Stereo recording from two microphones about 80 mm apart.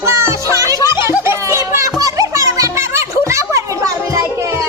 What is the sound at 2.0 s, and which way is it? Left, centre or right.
Music, right.